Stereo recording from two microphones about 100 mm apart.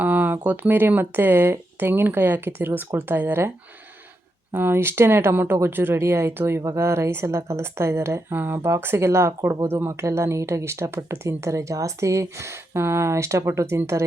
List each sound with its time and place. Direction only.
0.0 s a woman's voice: 15° right (ahead or behind)
4.5 s a woman's voice: 20° right (ahead or behind)